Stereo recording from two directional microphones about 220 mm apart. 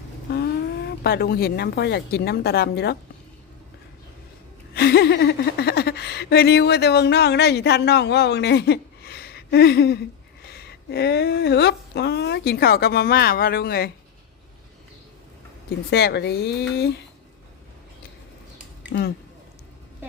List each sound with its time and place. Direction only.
0.3 s speech: 45° left (ahead or behind)
4.7 s a woman's voice: 45° left (ahead or behind)
15.9 s speech: 50° left (ahead or behind)
18.9 s speech: 50° left (ahead or behind)